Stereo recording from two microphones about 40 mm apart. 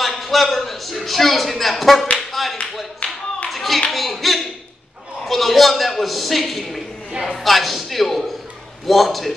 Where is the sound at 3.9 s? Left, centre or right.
Centre.